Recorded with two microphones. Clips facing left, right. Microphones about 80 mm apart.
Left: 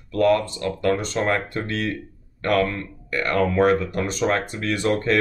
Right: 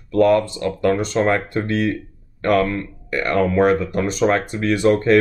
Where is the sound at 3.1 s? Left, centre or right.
Right.